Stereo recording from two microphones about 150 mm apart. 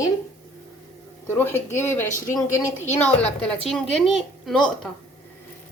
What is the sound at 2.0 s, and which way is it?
Speech, 60° left (ahead or behind).